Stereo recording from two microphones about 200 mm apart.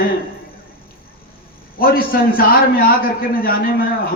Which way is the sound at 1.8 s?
45° left (ahead or behind).